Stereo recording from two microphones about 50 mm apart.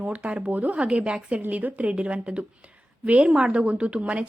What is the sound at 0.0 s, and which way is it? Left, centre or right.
Speech, right.